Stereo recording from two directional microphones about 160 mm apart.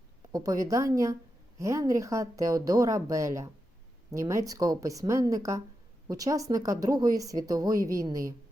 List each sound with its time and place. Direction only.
0.3 s a woman's voice: 20° right (ahead or behind)